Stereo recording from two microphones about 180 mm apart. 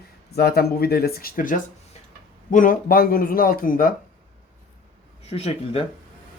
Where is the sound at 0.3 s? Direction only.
60° left (ahead or behind).